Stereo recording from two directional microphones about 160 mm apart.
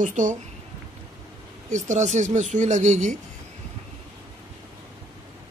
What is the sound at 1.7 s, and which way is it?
Speech, 50° right (ahead or behind).